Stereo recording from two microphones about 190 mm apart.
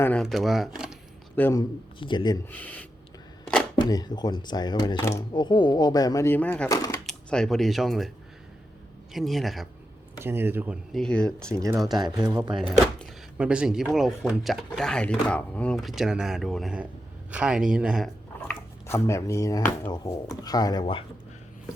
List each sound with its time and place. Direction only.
0.0 s speech: 5° left (ahead or behind)
1.4 s speech: 10° left (ahead or behind)
2.0 s speech: 25° left (ahead or behind)
2.5 s speech: 10° left (ahead or behind)
3.8 s speech: 20° left (ahead or behind)
7.0 s speech: 5° left (ahead or behind)
9.1 s speech: centre (ahead or behind)
10.2 s speech: 10° right (ahead or behind)
10.9 s speech: 5° left (ahead or behind)
18.9 s speech: 15° left (ahead or behind)